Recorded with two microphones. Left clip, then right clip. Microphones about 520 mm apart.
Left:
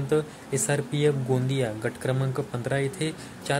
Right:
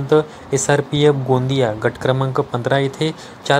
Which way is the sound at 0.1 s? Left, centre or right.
Left.